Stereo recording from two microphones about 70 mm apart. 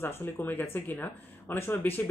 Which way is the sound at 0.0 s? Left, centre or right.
Left.